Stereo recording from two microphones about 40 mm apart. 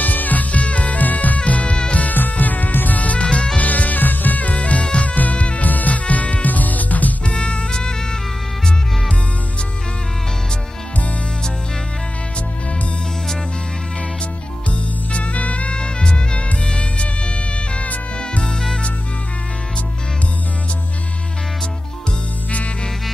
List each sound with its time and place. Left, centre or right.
0.0 s music: left
2.0 s music: left
7.2 s music: left
14.7 s music: left